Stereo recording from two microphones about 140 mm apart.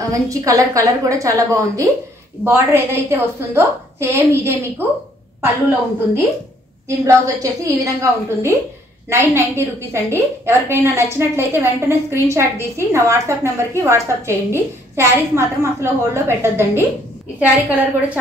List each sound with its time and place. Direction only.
0.1 s a woman's voice: 25° right (ahead or behind)
9.9 s a woman's voice: 20° right (ahead or behind)